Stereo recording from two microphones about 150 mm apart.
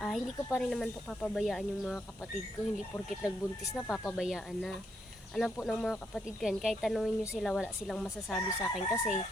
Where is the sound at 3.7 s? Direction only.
5° left (ahead or behind).